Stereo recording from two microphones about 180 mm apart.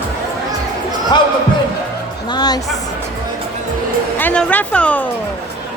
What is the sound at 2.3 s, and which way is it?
Music, 25° left (ahead or behind).